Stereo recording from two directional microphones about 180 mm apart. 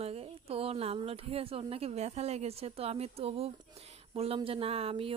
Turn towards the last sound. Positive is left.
turn(degrees=-30)  # may be behind; listen again after turning